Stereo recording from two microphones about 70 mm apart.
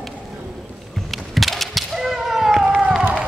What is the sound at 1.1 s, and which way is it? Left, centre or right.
Cat, centre.